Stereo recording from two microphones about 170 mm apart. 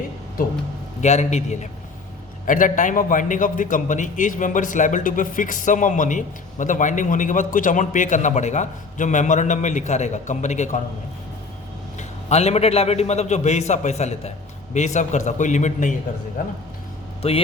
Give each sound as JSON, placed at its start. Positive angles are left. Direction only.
{"t": 1.0, "sound": "a man's voice", "side_deg": 40}
{"t": 11.9, "sound": "a man's voice", "side_deg": 40}
{"t": 17.2, "sound": "a man's voice", "side_deg": 35}